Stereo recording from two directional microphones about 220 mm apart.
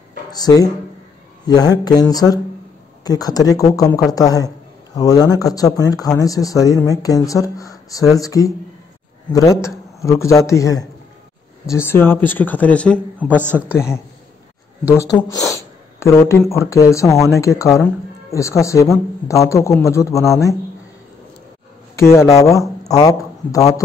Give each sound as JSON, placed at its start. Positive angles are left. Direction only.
{"t": 0.3, "sound": "speech", "side_deg": 15}
{"t": 13.4, "sound": "speech", "side_deg": -10}
{"t": 13.7, "sound": "speech", "side_deg": 10}
{"t": 21.9, "sound": "speech", "side_deg": 15}